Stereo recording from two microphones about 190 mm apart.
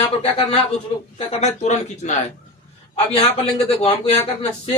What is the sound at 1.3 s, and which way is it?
A man's voice, 35° left (ahead or behind).